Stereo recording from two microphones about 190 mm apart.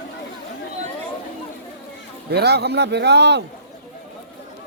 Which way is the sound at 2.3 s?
60° right (ahead or behind).